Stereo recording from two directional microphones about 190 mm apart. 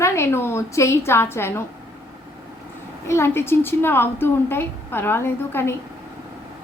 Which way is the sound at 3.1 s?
15° left (ahead or behind).